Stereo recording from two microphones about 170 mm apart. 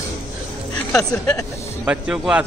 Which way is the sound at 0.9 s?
20° left (ahead or behind).